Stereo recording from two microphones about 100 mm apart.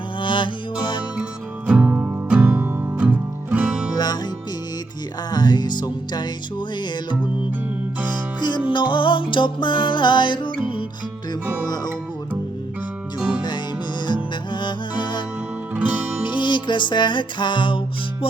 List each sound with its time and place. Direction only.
0.2 s music: 55° left (ahead or behind)
1.1 s music: 10° right (ahead or behind)
3.9 s music: 45° left (ahead or behind)
5.3 s music: 45° left (ahead or behind)
8.4 s music: 50° left (ahead or behind)
14.1 s music: 50° left (ahead or behind)
16.3 s music: 50° left (ahead or behind)